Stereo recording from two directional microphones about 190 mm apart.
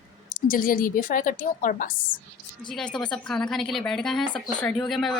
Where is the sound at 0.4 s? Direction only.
45° left (ahead or behind).